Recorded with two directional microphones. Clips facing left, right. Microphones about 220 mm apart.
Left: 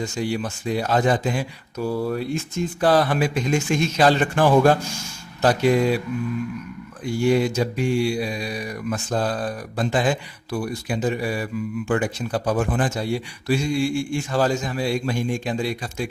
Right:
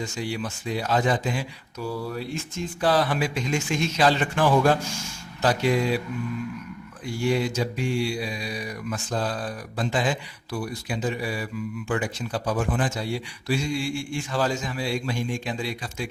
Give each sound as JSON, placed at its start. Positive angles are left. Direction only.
{"t": 0.0, "sound": "speech", "side_deg": 45}
{"t": 7.3, "sound": "speech", "side_deg": 50}